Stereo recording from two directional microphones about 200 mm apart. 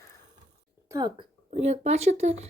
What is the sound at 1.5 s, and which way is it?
Speech, 35° right (ahead or behind).